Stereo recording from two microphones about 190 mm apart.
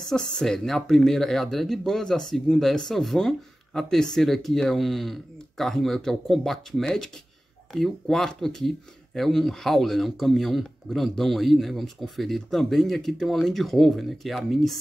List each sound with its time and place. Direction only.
0.1 s speech: centre (ahead or behind)